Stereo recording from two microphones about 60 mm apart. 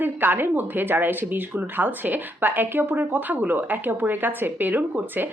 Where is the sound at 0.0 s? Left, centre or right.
Right.